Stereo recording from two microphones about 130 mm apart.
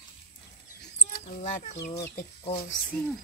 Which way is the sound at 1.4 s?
70° left (ahead or behind).